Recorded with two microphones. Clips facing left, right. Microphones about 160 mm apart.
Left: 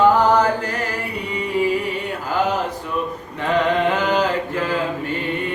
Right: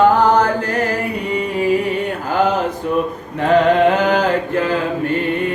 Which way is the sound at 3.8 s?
50° right (ahead or behind).